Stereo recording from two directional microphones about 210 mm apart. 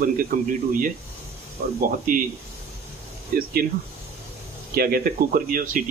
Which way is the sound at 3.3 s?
45° right (ahead or behind).